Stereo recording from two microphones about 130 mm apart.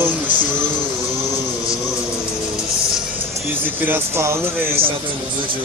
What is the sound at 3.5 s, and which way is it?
Speech, 15° right (ahead or behind).